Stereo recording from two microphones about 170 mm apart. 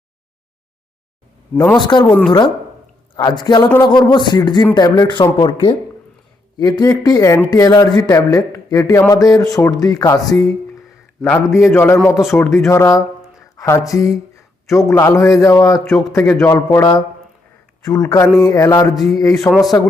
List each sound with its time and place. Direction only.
1.9 s speech: 25° left (ahead or behind)
3.2 s a man's voice: 25° left (ahead or behind)
15.8 s a man's voice: centre (ahead or behind)
16.1 s speech: 20° left (ahead or behind)
19.5 s a man's voice: centre (ahead or behind)